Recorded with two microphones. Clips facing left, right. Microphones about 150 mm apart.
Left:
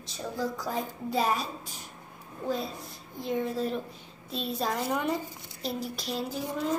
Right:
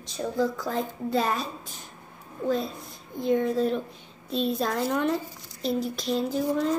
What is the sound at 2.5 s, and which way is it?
Speech, 5° left (ahead or behind).